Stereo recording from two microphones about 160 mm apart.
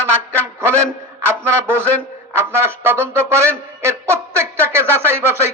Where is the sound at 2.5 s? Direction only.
15° right (ahead or behind).